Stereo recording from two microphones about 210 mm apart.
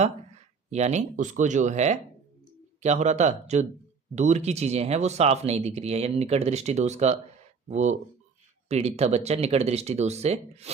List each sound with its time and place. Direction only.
0.7 s speech: 30° right (ahead or behind)